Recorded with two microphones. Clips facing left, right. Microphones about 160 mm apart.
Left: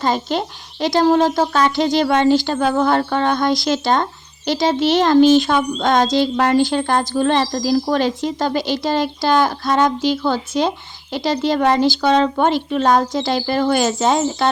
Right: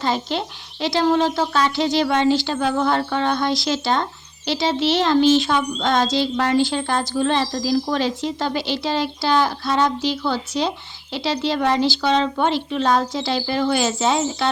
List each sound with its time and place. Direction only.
0.0 s speech: 45° left (ahead or behind)